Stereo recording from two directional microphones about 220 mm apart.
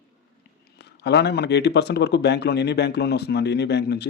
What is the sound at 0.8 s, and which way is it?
Speech, 50° left (ahead or behind).